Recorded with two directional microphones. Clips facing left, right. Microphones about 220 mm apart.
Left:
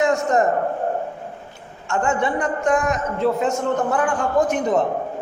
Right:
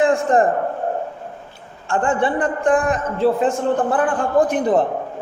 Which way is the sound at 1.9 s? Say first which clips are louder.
Right 2 dB; 30° right (ahead or behind).